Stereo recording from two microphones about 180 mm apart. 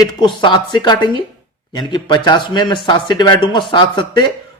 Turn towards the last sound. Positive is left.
turn(degrees=25)  # may be behind; listen again after turning